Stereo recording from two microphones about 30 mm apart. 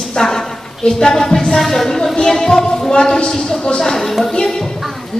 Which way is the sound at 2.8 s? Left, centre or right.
Left.